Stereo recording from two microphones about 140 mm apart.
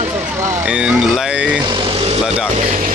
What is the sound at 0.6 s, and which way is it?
Speech, 5° right (ahead or behind).